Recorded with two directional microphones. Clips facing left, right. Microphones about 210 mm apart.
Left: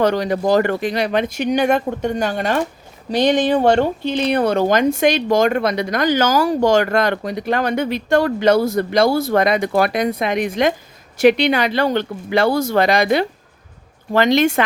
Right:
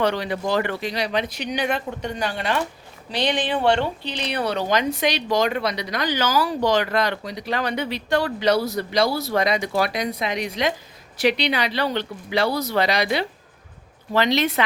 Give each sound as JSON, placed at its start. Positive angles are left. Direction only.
{"t": 0.0, "sound": "speech", "side_deg": 45}